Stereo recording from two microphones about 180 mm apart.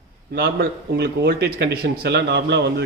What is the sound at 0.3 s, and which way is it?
Speech, 65° right (ahead or behind).